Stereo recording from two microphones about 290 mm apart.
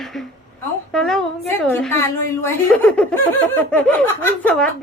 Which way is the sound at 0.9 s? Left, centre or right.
Centre.